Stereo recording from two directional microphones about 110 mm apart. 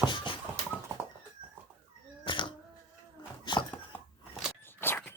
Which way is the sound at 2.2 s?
50° left (ahead or behind).